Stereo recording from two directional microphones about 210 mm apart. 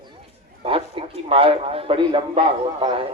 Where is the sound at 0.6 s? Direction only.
25° right (ahead or behind).